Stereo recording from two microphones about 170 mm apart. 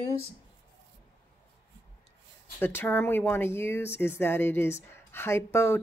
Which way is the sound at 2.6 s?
15° left (ahead or behind).